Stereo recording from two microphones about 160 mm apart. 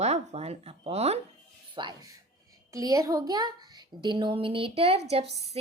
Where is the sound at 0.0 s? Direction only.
45° right (ahead or behind).